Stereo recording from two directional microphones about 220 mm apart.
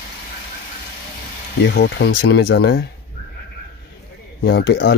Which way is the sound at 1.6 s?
50° left (ahead or behind).